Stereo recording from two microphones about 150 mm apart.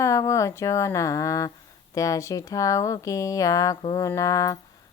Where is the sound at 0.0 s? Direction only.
20° left (ahead or behind).